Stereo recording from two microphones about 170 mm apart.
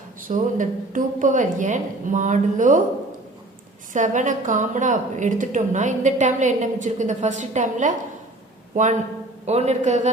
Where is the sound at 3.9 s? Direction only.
45° right (ahead or behind).